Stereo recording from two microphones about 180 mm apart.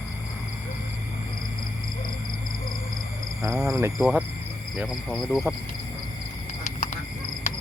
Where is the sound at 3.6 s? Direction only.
15° right (ahead or behind).